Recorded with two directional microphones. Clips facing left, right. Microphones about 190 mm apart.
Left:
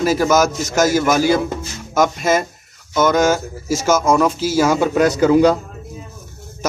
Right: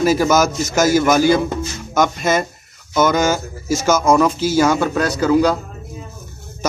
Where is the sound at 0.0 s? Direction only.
Centre (ahead or behind).